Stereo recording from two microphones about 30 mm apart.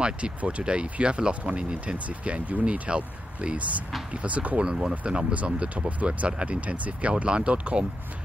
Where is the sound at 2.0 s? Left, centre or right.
Right.